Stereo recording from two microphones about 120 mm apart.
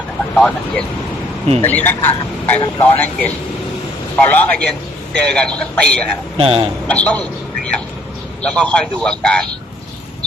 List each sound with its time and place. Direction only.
0.3 s speech: 5° left (ahead or behind)
1.6 s a man's voice: 15° left (ahead or behind)
6.3 s speech: 50° right (ahead or behind)
6.8 s a man's voice: 10° left (ahead or behind)
8.4 s a man's voice: 10° left (ahead or behind)